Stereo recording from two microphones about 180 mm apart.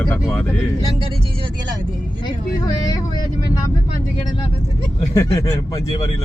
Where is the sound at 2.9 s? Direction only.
20° left (ahead or behind).